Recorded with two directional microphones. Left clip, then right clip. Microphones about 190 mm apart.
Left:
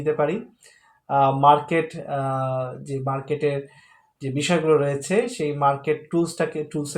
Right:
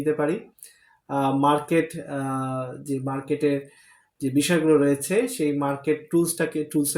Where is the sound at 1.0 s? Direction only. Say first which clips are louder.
Left 6 dB; 35° right (ahead or behind).